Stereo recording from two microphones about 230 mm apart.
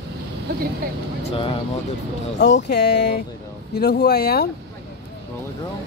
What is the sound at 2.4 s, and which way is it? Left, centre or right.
Speech, left.